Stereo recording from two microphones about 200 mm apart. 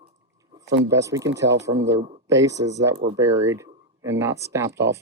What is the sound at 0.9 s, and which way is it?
Speech, 15° right (ahead or behind).